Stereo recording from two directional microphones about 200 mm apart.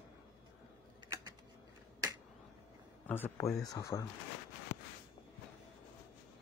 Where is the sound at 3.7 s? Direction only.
15° left (ahead or behind).